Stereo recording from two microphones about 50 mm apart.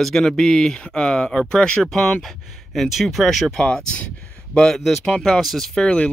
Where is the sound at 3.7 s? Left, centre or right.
Centre.